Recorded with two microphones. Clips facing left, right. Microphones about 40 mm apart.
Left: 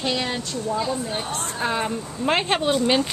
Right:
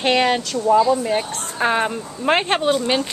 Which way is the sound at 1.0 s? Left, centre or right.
Right.